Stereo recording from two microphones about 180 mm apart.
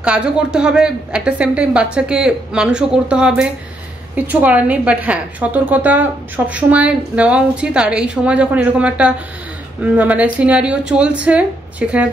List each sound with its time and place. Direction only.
0.0 s a woman's voice: 5° right (ahead or behind)